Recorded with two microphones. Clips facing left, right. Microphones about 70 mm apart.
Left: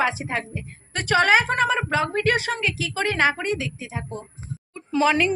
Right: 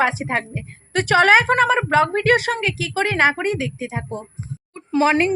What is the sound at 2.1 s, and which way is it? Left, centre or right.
A woman's voice, right.